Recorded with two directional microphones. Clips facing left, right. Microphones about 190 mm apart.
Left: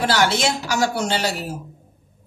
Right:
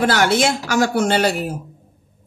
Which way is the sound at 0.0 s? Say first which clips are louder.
Right 3 dB; 50° right (ahead or behind).